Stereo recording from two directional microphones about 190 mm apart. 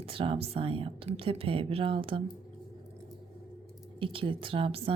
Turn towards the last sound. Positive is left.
turn(degrees=-30)  # may be behind; listen again after turning